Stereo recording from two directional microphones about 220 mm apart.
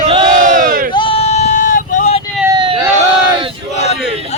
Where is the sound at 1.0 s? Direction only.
25° left (ahead or behind).